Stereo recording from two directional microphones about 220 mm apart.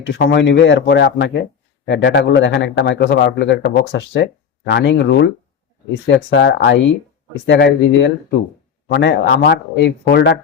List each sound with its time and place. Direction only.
0.0 s a man's voice: 55° left (ahead or behind)